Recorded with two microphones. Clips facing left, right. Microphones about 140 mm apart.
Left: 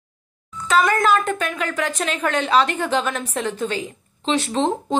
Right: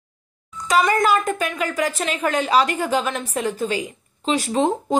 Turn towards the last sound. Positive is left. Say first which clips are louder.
# right 1 dB
turn(degrees=-10)  # may be behind; listen again after turning